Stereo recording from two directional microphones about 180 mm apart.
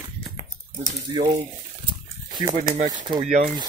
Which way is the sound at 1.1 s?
25° right (ahead or behind).